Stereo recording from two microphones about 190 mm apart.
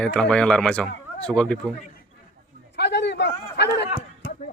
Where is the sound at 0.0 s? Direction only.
5° left (ahead or behind).